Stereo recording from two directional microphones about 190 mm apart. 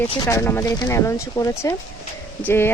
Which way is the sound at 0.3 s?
15° left (ahead or behind).